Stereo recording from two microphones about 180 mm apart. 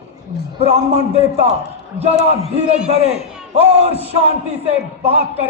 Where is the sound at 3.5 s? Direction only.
35° right (ahead or behind).